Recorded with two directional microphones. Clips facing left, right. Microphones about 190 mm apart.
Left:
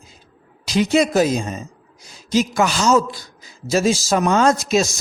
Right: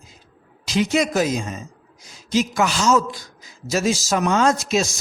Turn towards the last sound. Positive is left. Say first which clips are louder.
# left 3 dB
turn(degrees=40)  # may be behind; listen again after turning